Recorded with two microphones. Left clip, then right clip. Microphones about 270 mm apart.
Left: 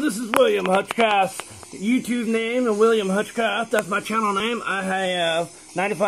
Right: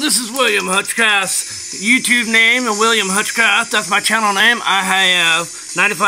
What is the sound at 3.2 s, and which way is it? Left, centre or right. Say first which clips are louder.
Speech: right 9 dB; centre.